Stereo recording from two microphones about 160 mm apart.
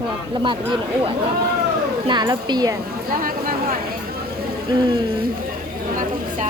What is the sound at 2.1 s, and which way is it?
Speech, 25° right (ahead or behind).